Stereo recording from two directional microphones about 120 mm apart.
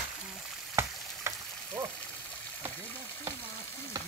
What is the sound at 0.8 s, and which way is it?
Frying, 25° right (ahead or behind).